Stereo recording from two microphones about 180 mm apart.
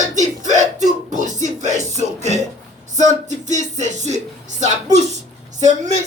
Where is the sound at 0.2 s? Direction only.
40° right (ahead or behind).